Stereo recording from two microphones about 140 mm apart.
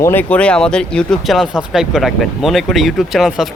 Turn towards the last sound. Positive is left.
turn(degrees=0)  # may be behind; listen again after turning